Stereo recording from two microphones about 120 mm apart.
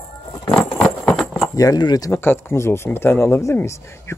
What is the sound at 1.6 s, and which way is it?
Speech, 35° left (ahead or behind).